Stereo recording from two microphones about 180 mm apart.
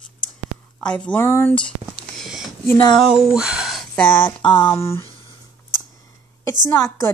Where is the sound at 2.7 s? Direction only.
25° left (ahead or behind).